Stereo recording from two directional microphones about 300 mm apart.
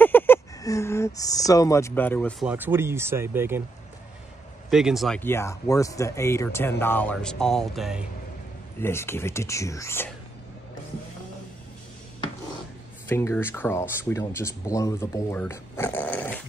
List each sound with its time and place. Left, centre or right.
0.0 s speech: centre
2.5 s speech: centre
4.6 s speech: centre
13.1 s speech: centre